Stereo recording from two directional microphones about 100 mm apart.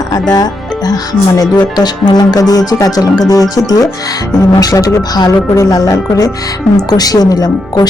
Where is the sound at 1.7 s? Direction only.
45° left (ahead or behind).